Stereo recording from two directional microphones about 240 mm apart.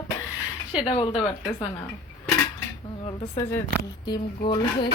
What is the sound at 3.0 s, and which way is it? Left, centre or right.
Speech, left.